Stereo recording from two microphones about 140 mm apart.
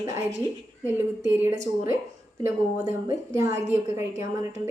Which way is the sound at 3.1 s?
20° right (ahead or behind).